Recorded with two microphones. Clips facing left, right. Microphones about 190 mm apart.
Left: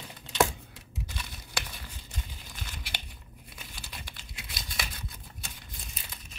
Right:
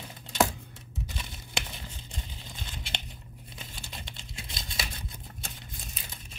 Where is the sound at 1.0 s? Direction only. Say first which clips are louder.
Right 1 dB; 25° right (ahead or behind).